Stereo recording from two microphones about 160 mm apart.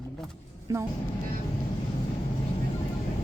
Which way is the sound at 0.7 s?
15° right (ahead or behind).